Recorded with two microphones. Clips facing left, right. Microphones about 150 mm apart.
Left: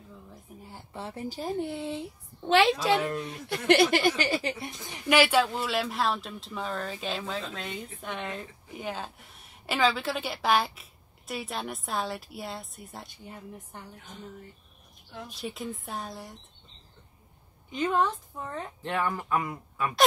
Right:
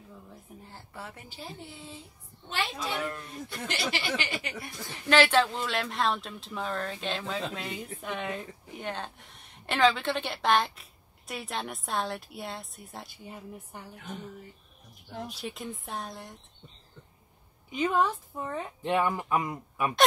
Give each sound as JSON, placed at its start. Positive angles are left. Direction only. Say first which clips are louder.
{"t": 0.9, "sound": "a woman's voice", "louder": "left 9 dB", "side_deg": 30}
{"t": 3.2, "sound": "speech", "louder": "left 5 dB", "side_deg": 80}
{"t": 15.3, "sound": "speech", "louder": "left 2 dB", "side_deg": 0}
{"t": 17.6, "sound": "speech", "louder": "even", "side_deg": -10}